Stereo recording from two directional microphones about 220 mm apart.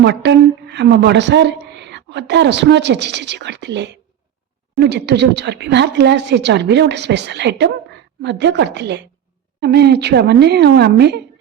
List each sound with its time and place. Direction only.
0.0 s a woman's voice: 50° right (ahead or behind)